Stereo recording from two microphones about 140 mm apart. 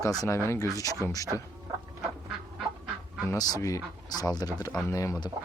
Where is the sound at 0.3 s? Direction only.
20° left (ahead or behind).